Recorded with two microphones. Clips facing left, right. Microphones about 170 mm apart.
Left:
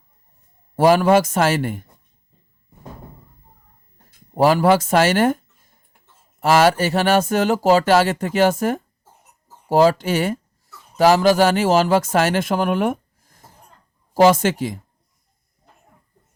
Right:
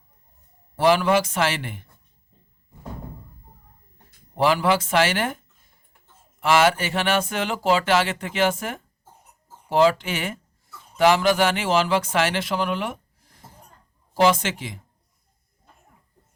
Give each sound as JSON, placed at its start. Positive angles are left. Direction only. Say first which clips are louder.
{"t": 0.8, "sound": "speech", "louder": "left 5 dB", "side_deg": 45}
{"t": 4.4, "sound": "speech", "louder": "left 5 dB", "side_deg": 40}
{"t": 6.4, "sound": "speech", "louder": "left 4 dB", "side_deg": 40}